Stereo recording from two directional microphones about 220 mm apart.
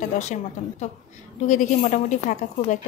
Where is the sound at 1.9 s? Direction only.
35° left (ahead or behind).